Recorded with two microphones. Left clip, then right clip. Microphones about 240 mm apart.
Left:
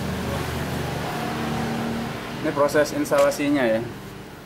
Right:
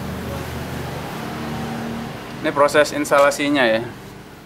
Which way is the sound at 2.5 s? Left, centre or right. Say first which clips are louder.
Right 5 dB; centre.